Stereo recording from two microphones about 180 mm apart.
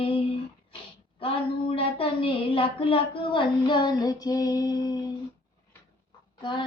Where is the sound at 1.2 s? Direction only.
30° left (ahead or behind).